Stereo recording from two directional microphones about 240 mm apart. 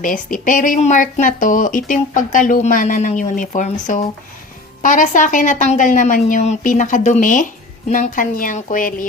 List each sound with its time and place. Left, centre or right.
0.0 s a woman's voice: left